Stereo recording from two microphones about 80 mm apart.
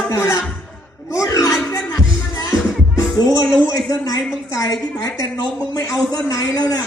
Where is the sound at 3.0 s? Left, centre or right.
Left.